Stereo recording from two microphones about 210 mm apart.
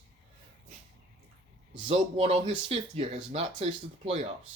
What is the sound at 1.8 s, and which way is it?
Speech, 25° right (ahead or behind).